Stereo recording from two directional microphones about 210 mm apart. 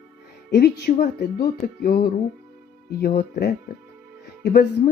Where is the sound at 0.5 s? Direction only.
50° left (ahead or behind).